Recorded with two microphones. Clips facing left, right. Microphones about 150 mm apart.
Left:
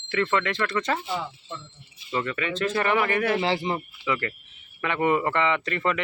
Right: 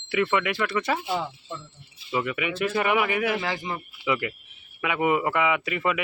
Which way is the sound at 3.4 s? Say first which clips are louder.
Left 5 dB; 30° left (ahead or behind).